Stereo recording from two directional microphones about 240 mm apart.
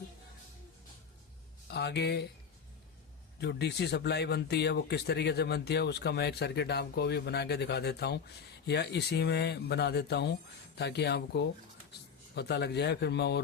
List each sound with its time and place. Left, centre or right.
1.6 s speech: left
3.4 s a man's voice: left